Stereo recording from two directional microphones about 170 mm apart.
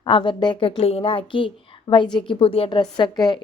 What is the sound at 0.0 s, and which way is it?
A woman's voice, 30° left (ahead or behind).